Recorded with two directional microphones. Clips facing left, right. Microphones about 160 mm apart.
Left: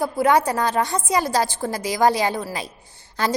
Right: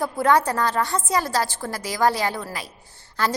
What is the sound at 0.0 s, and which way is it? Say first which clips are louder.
A woman's voice: left 1 dB; 10° left (ahead or behind).